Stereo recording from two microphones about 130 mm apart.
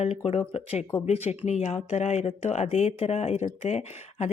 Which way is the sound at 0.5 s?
50° left (ahead or behind).